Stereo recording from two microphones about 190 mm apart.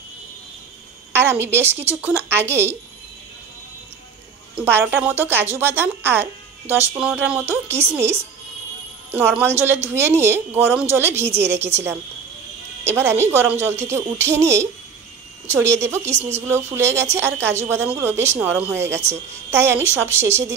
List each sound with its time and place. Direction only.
1.1 s speech: 10° right (ahead or behind)
4.6 s speech: 10° right (ahead or behind)
16.2 s speech: 35° right (ahead or behind)
16.4 s speech: 15° right (ahead or behind)